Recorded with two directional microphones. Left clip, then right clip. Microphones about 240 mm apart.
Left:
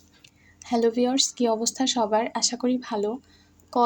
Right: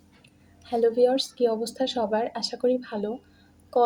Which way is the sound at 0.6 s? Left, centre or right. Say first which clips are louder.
Right 2 dB; left.